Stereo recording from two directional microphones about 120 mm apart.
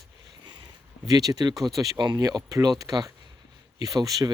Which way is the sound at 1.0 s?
30° right (ahead or behind).